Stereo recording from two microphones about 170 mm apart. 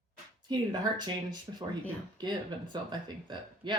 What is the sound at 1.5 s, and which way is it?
Speech, 25° right (ahead or behind).